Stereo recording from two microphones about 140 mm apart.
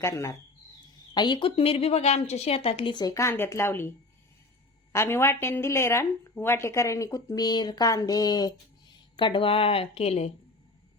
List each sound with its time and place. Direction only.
0.0 s a woman's voice: 20° left (ahead or behind)
1.1 s a woman's voice: 30° left (ahead or behind)